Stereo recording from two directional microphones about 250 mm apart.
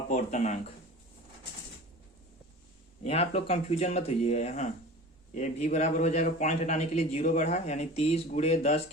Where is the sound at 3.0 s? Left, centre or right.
Left.